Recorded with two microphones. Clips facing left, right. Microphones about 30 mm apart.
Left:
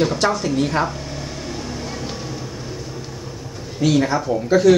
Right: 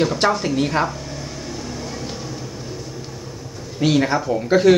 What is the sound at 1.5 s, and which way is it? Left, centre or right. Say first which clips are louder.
Music: left 1 dB; left.